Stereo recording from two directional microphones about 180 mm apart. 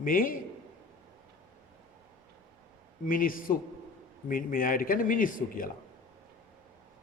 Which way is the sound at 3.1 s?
50° left (ahead or behind).